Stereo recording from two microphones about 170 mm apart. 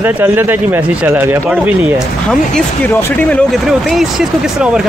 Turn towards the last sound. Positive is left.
turn(degrees=0)  # may be behind; listen again after turning